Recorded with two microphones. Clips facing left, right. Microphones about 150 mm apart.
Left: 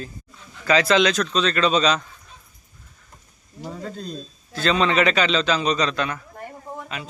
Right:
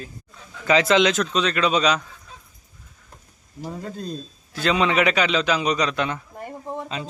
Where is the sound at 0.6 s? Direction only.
20° right (ahead or behind).